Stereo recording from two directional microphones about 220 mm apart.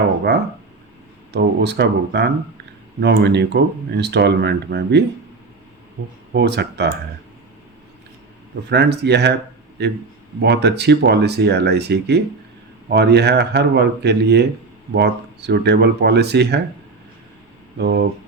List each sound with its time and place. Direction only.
1.3 s speech: 50° right (ahead or behind)
6.3 s speech: 50° right (ahead or behind)
8.7 s speech: 50° right (ahead or behind)
17.7 s speech: 50° right (ahead or behind)